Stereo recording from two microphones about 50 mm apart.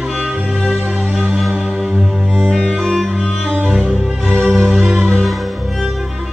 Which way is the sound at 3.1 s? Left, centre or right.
Centre.